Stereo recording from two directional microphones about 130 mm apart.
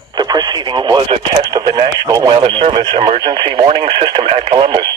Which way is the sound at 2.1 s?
30° right (ahead or behind).